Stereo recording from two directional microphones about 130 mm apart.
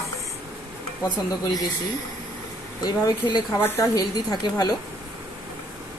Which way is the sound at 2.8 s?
30° left (ahead or behind).